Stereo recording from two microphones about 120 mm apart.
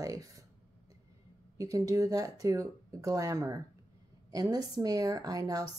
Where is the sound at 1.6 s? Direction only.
25° right (ahead or behind).